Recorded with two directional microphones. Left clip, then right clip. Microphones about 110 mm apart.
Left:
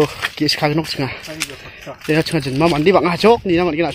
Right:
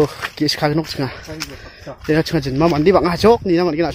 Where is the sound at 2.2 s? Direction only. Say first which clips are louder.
Even; 15° right (ahead or behind).